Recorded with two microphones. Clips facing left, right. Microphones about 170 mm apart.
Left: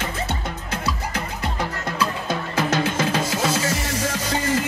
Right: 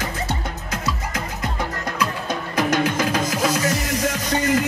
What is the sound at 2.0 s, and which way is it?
Music, 25° left (ahead or behind).